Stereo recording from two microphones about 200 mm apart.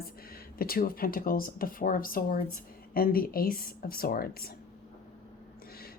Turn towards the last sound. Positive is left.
turn(degrees=50)  # may be behind; listen again after turning